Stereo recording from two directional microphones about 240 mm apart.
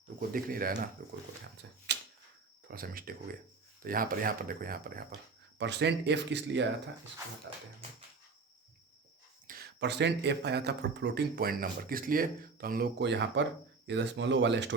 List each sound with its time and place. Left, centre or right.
0.2 s speech: right
1.9 s a sound: right
2.6 s speech: right
9.5 s speech: right